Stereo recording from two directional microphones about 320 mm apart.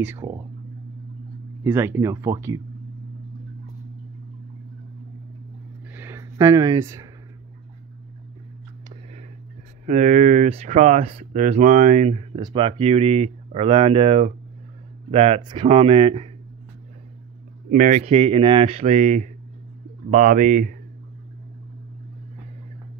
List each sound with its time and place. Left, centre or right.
0.0 s speech: centre
1.6 s speech: centre
5.9 s a sound: centre
9.8 s speech: right
17.6 s speech: right